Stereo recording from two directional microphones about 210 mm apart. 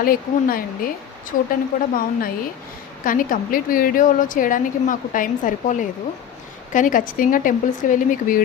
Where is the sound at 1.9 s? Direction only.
45° left (ahead or behind).